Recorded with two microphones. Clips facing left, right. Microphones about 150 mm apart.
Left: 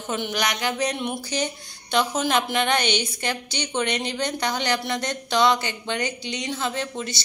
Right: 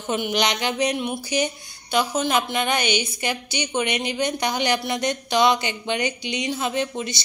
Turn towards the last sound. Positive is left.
turn(degrees=-15)  # may be behind; listen again after turning